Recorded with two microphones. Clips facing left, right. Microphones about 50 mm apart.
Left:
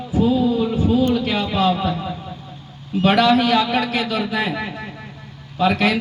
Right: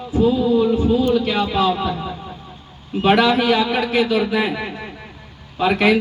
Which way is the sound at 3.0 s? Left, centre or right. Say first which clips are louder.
Even; centre.